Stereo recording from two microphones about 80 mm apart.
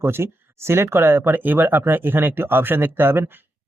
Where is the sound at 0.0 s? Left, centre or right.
Right.